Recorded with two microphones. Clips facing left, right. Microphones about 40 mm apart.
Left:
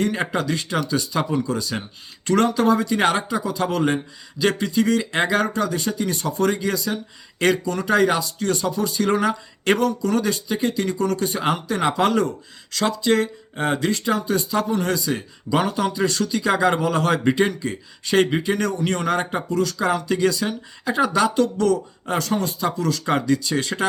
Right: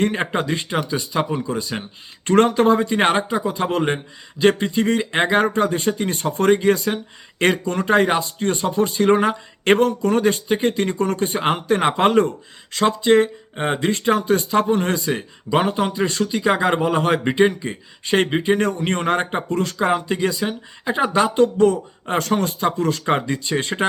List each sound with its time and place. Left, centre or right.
0.0 s speech: right
2.2 s speech: right
22.2 s speech: right